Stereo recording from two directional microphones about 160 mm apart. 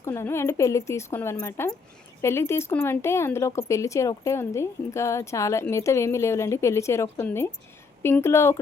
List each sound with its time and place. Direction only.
0.0 s speech: 15° left (ahead or behind)